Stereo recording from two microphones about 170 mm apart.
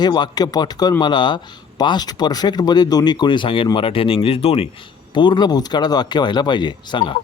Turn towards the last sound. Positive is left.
turn(degrees=30)  # may be behind; listen again after turning